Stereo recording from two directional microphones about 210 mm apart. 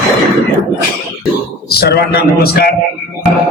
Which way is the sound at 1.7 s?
50° left (ahead or behind).